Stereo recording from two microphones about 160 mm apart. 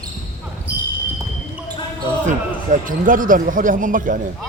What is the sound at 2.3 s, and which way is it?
Speech, 55° right (ahead or behind).